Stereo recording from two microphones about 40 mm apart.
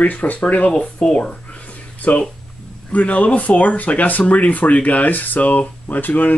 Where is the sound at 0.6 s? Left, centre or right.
Left.